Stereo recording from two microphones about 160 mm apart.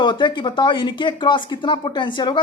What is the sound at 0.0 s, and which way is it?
Speech, 30° left (ahead or behind).